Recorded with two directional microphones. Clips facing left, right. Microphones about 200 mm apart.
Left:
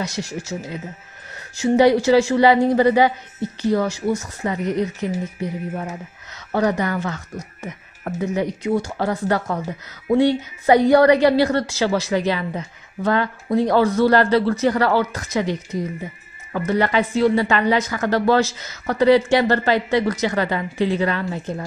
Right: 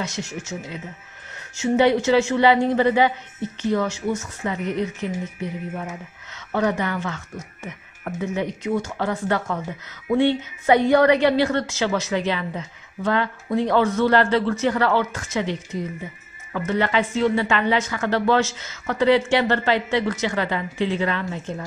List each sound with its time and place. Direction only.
0.0 s a woman's voice: 35° left (ahead or behind)